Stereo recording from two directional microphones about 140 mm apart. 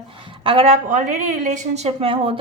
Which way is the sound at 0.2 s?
40° right (ahead or behind).